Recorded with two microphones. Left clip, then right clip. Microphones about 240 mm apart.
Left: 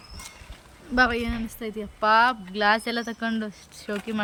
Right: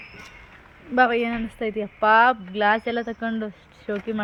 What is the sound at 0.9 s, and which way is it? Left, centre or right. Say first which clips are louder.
Speech: right 3 dB; centre.